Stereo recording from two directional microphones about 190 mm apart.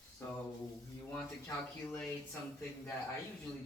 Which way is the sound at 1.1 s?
10° left (ahead or behind).